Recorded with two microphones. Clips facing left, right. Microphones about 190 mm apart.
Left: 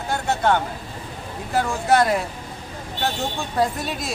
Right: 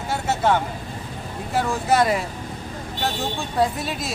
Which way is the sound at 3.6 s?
Centre (ahead or behind).